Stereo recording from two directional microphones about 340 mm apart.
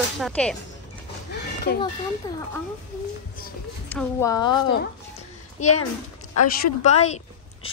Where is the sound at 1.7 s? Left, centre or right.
Left.